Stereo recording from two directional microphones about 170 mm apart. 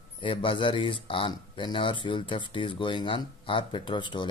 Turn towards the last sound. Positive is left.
turn(degrees=30)  # may be behind; listen again after turning